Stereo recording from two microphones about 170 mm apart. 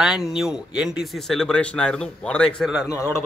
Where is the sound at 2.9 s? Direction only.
15° left (ahead or behind).